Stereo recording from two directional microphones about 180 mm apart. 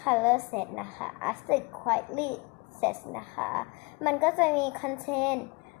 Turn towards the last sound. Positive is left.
turn(degrees=0)  # may be behind; listen again after turning